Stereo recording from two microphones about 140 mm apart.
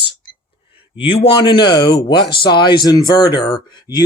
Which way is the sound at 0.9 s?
40° left (ahead or behind).